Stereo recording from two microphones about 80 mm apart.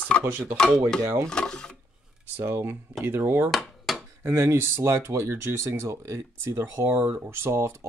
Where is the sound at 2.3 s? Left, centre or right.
Right.